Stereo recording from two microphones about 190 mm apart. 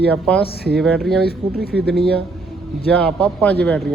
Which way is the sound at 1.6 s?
60° right (ahead or behind).